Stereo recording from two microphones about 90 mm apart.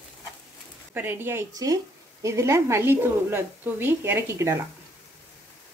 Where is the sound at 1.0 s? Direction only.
25° right (ahead or behind).